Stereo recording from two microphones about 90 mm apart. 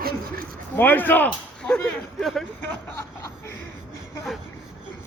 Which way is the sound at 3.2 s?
30° left (ahead or behind).